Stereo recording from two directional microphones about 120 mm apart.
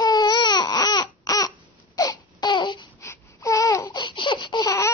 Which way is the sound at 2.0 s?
35° left (ahead or behind).